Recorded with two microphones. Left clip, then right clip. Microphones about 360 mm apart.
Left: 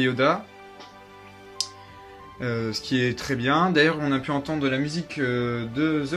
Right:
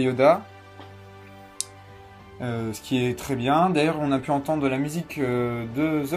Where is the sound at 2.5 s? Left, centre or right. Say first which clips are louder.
Left 1 dB; centre.